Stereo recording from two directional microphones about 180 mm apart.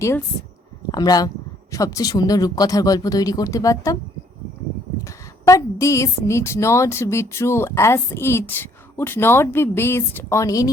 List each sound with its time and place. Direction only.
0.9 s speech: 20° left (ahead or behind)
5.0 s a woman's voice: 15° left (ahead or behind)